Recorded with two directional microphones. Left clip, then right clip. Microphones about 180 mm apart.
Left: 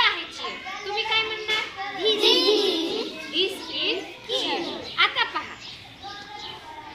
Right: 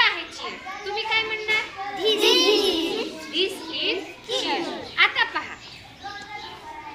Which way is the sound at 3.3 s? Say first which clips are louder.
Even; 15° right (ahead or behind).